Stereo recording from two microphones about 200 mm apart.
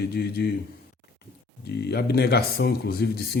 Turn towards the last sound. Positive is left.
turn(degrees=50)  # may be behind; listen again after turning